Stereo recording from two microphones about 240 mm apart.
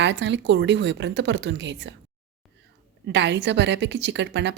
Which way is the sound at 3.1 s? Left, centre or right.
Right.